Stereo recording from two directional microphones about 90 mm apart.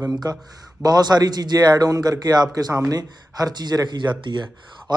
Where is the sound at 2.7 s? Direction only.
30° right (ahead or behind).